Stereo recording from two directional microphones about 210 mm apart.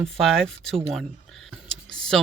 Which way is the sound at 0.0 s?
Centre (ahead or behind).